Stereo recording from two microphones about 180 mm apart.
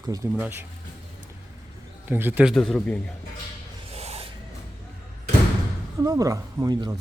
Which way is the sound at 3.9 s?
35° right (ahead or behind).